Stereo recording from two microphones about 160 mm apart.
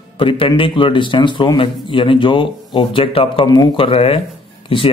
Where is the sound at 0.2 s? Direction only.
35° left (ahead or behind).